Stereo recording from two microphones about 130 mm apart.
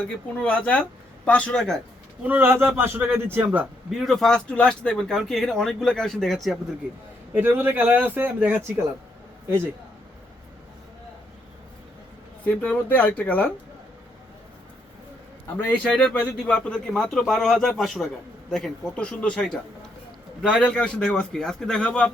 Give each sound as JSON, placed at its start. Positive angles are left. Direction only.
{"t": 0.0, "sound": "speech", "side_deg": 10}
{"t": 2.2, "sound": "a man's voice", "side_deg": -15}
{"t": 3.9, "sound": "speech", "side_deg": 0}
{"t": 7.3, "sound": "a man's voice", "side_deg": -15}
{"t": 12.5, "sound": "speech", "side_deg": 10}
{"t": 15.5, "sound": "speech", "side_deg": 10}